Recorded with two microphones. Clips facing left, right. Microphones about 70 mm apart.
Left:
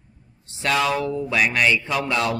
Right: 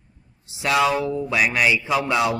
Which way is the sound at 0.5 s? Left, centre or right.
Centre.